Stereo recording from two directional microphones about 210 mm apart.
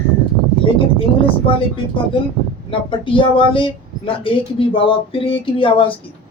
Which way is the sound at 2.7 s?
25° left (ahead or behind).